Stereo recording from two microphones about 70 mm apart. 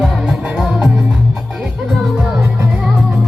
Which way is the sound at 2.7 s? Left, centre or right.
Centre.